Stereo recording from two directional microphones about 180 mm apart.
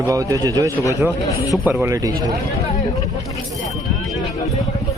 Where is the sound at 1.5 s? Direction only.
10° right (ahead or behind).